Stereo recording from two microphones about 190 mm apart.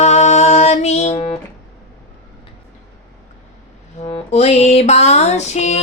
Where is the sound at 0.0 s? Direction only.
35° left (ahead or behind).